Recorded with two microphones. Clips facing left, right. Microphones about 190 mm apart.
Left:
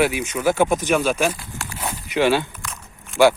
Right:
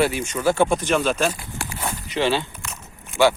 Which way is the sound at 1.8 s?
5° left (ahead or behind).